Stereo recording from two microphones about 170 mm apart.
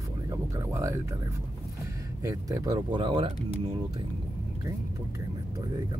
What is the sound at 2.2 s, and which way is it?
Speech, 20° right (ahead or behind).